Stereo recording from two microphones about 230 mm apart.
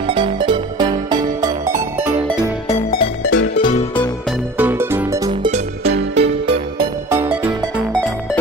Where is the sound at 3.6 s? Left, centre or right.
Left.